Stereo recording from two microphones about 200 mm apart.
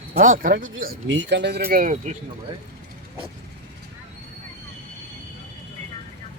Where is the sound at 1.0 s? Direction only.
65° right (ahead or behind); by 2.1 s 40° right (ahead or behind).